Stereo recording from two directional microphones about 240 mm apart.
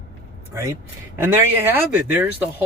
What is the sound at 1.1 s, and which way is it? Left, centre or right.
Speech, centre.